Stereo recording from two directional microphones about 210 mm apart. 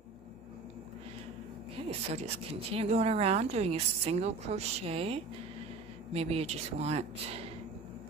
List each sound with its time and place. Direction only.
1.9 s speech: 30° right (ahead or behind)